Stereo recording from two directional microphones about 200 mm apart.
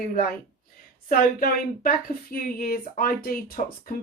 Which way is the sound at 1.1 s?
45° left (ahead or behind).